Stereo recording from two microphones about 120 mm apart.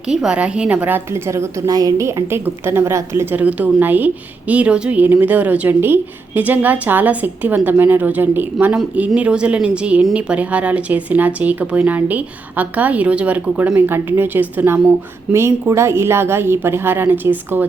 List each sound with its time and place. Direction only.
0.1 s a woman's voice: 5° right (ahead or behind)